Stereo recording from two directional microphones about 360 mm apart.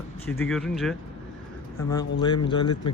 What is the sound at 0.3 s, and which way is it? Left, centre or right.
Speech, centre.